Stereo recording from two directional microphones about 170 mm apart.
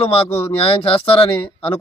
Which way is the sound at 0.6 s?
35° left (ahead or behind).